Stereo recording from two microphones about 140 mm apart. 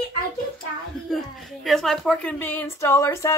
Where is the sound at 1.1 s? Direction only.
Centre (ahead or behind); by 3.3 s 20° left (ahead or behind).